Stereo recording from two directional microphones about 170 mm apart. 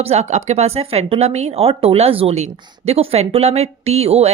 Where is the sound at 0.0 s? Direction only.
40° right (ahead or behind).